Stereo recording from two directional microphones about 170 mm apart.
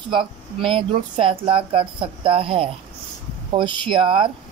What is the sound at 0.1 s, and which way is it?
Speech, 30° right (ahead or behind).